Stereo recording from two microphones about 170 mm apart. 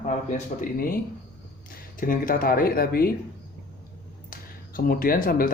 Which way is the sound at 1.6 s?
55° left (ahead or behind).